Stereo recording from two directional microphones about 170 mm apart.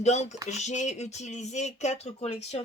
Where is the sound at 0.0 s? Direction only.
40° left (ahead or behind).